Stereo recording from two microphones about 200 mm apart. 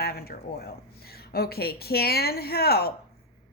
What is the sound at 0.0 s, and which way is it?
A woman's voice, 50° left (ahead or behind).